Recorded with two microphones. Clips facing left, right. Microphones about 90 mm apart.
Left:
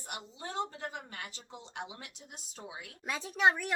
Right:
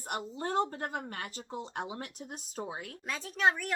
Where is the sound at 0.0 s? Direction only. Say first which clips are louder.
Right 7 dB; 50° right (ahead or behind).